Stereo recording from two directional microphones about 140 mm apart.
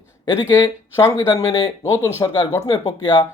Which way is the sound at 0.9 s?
20° left (ahead or behind).